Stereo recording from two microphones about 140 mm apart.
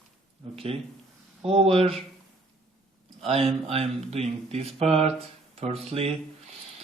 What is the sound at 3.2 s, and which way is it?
Speech, 45° right (ahead or behind).